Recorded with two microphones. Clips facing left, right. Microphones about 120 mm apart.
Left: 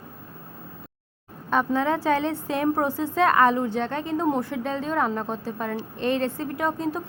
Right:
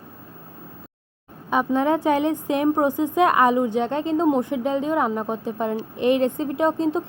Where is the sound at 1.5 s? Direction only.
15° right (ahead or behind).